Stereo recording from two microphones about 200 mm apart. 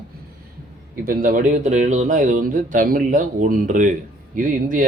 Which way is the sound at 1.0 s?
45° right (ahead or behind).